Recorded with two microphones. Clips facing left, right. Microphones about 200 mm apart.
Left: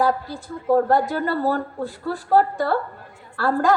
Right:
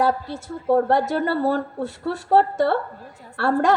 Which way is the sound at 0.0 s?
25° right (ahead or behind).